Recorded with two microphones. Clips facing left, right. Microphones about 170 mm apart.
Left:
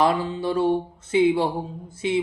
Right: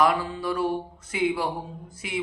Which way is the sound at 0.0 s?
25° left (ahead or behind).